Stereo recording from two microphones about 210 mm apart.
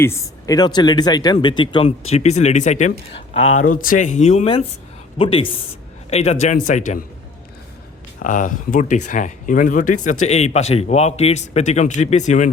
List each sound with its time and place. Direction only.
0.0 s speech: 15° left (ahead or behind); by 7.0 s 35° left (ahead or behind)
8.2 s speech: 40° left (ahead or behind)